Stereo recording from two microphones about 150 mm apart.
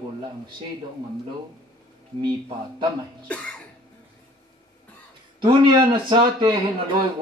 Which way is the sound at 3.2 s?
10° left (ahead or behind).